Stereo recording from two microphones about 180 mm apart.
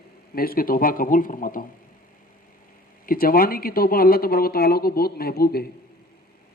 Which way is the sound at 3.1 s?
55° left (ahead or behind).